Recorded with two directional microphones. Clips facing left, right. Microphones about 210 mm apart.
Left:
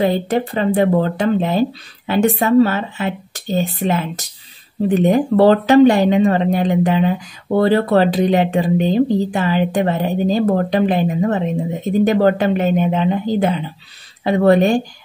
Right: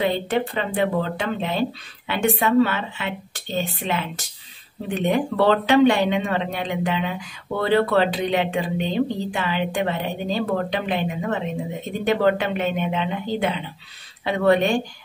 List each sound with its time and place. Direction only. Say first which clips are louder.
0.0 s speech: left 5 dB; 40° left (ahead or behind)